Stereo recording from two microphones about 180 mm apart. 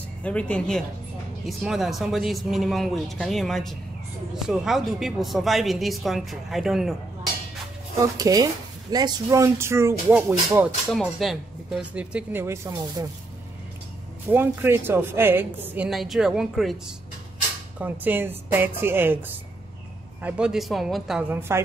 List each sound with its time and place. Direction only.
0.2 s speech: 5° left (ahead or behind)
8.0 s a woman's voice: 20° right (ahead or behind)
10.9 s a woman's voice: centre (ahead or behind); by 13.0 s 15° right (ahead or behind)
14.3 s a woman's voice: 10° right (ahead or behind)